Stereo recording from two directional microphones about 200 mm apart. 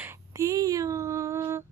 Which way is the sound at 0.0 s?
15° right (ahead or behind).